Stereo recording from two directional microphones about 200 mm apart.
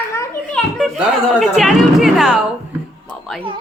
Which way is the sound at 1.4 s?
Centre (ahead or behind).